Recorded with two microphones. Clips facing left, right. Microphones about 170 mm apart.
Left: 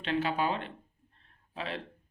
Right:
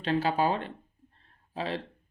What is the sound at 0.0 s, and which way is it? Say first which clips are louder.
Speech: right 4 dB; 35° right (ahead or behind).